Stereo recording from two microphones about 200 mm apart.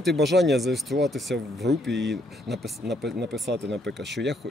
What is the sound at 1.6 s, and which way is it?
Speech, 60° right (ahead or behind).